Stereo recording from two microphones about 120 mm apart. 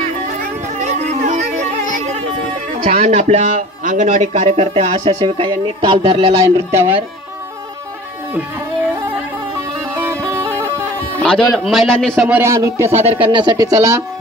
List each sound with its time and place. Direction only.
0.4 s music: 70° right (ahead or behind); by 2.0 s 85° right
2.9 s a man's voice: 90° right; by 6.4 s 50° right (ahead or behind)
6.4 s speech: 20° right (ahead or behind)
11.1 s a man's voice: 5° left (ahead or behind)
12.2 s speech: 10° right (ahead or behind)
12.4 s speech: 25° right (ahead or behind)
13.3 s speech: 40° right (ahead or behind)
13.7 s speech: 25° right (ahead or behind)